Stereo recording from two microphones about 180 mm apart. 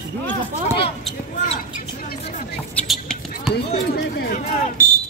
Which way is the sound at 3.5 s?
60° left (ahead or behind).